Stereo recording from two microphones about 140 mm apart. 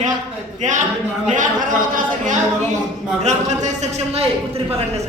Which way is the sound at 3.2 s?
55° right (ahead or behind).